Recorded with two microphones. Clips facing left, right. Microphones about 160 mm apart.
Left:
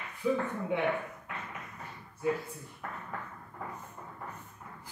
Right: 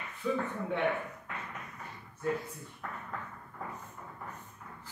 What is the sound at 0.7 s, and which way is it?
Speech, 10° left (ahead or behind).